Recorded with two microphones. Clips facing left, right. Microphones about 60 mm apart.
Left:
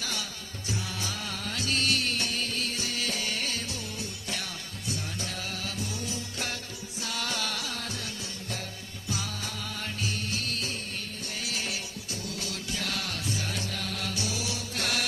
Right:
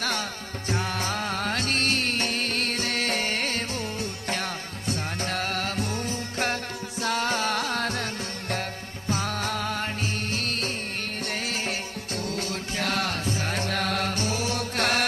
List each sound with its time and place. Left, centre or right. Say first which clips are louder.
0.0 s music: right 7 dB; right
4.9 s music: right 7 dB; right
9.0 s music: right 8 dB; right